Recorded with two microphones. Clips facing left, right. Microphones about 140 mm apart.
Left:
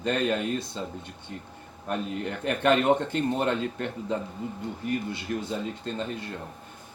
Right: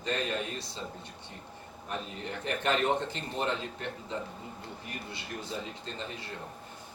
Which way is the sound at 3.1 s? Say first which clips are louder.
Left 8 dB; 55° left (ahead or behind).